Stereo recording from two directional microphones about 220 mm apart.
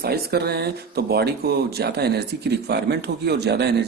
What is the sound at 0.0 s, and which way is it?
Speech, 45° right (ahead or behind).